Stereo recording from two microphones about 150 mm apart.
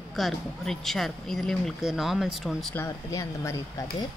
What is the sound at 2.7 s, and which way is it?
Speech, 20° left (ahead or behind).